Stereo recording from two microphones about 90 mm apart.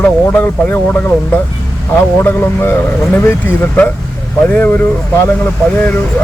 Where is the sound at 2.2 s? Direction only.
25° left (ahead or behind).